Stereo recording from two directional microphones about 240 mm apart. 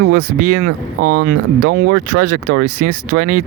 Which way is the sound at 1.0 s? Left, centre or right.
Right.